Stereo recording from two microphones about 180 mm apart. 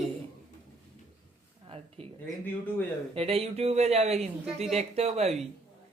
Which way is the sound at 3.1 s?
35° right (ahead or behind).